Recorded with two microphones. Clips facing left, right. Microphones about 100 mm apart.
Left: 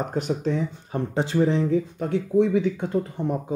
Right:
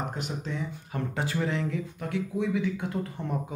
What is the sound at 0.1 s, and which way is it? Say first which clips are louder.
Speech: left 10 dB; 40° left (ahead or behind).